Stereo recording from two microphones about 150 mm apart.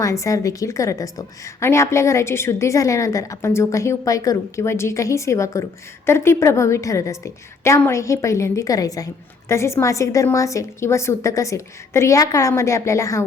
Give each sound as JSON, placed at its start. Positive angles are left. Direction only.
{"t": 0.0, "sound": "a woman's voice", "side_deg": 20}